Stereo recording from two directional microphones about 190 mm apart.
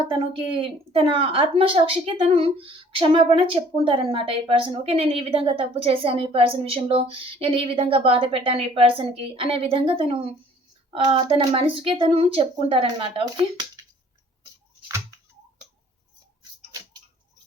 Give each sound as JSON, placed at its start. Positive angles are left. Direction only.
{"t": 0.1, "sound": "a woman's voice", "side_deg": -25}